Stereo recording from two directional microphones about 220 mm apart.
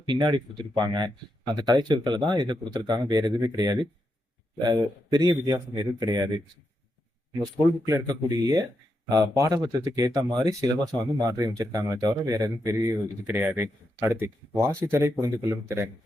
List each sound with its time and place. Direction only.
0.1 s speech: 20° right (ahead or behind)
7.4 s speech: 15° right (ahead or behind)